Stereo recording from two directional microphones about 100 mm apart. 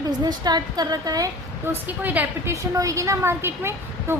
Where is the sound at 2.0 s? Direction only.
15° right (ahead or behind).